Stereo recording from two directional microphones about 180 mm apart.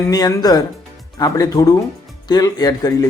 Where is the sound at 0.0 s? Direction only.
20° left (ahead or behind).